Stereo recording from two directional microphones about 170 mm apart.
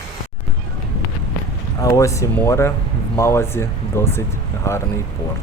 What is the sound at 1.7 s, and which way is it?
Speech, 20° left (ahead or behind).